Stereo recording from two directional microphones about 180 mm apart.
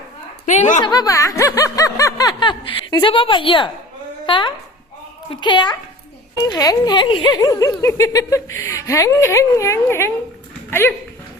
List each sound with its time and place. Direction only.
0.4 s a woman's voice: 40° left (ahead or behind)
0.8 s snicker: 20° left (ahead or behind)
6.3 s speech: 20° left (ahead or behind)